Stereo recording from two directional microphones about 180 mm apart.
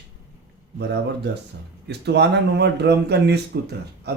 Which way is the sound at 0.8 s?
65° right (ahead or behind).